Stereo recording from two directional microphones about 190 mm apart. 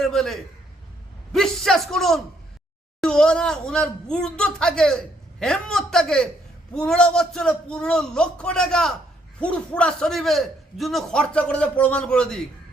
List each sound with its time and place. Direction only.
0.0 s speech: centre (ahead or behind)